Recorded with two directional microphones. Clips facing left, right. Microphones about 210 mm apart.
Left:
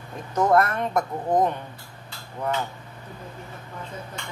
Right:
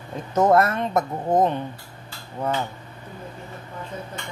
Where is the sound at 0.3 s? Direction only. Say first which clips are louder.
Right 2 dB; 25° right (ahead or behind).